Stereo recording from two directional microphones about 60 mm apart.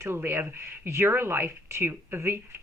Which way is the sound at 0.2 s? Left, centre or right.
Right.